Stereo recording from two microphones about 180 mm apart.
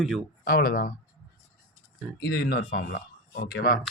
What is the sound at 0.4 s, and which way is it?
Speech, 55° left (ahead or behind).